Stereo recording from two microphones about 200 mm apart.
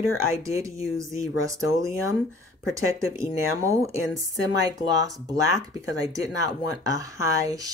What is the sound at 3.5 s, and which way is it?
Speech, 15° right (ahead or behind).